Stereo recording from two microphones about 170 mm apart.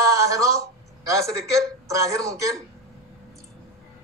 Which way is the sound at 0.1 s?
20° right (ahead or behind).